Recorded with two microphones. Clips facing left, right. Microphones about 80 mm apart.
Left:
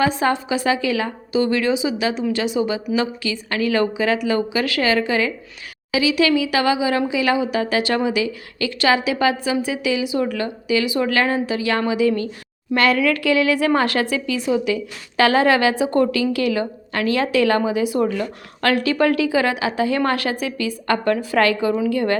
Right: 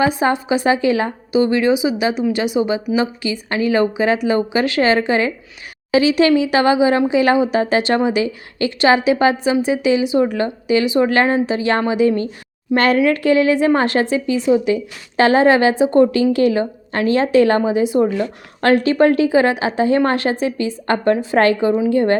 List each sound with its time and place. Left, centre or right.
0.0 s a woman's voice: centre
1.3 s a woman's voice: right